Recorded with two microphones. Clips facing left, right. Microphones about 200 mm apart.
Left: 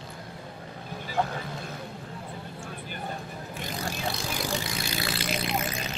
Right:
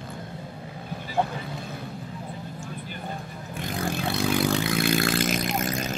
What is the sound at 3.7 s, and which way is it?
Vehicle, 55° right (ahead or behind).